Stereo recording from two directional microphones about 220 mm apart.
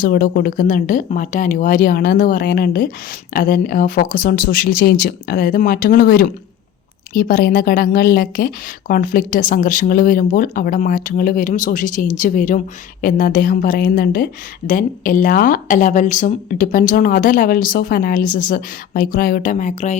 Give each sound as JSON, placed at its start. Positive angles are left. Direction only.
{"t": 0.0, "sound": "a woman's voice", "side_deg": 40}